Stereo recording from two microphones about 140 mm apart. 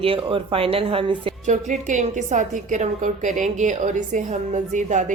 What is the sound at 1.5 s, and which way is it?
A woman's voice, 60° right (ahead or behind).